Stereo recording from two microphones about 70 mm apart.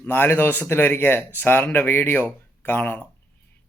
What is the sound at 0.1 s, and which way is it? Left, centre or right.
Speech, left.